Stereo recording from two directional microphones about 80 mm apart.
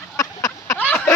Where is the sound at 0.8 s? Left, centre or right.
Centre.